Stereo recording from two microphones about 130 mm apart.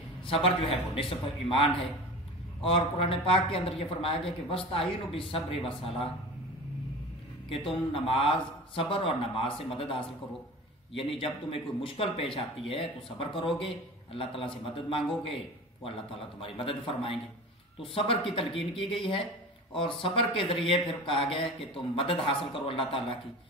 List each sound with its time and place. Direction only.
0.3 s speech: 45° left (ahead or behind)
2.6 s speech: 45° left (ahead or behind)
7.4 s speech: 45° left (ahead or behind)
16.3 s speech: 45° left (ahead or behind)